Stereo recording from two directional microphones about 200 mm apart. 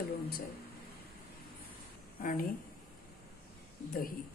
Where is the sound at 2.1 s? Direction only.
45° left (ahead or behind).